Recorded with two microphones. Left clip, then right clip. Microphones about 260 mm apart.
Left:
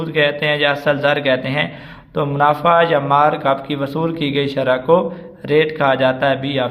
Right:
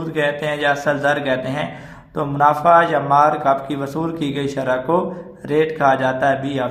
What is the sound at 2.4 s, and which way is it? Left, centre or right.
Mantra, left.